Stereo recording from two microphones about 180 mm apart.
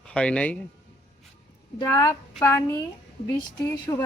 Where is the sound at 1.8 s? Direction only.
20° left (ahead or behind).